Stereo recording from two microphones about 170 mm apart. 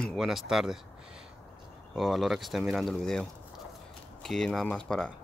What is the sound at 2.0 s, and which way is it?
Speech, centre (ahead or behind).